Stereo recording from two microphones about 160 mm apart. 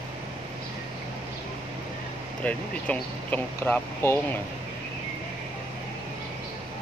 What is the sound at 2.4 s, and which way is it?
Speech, 10° left (ahead or behind).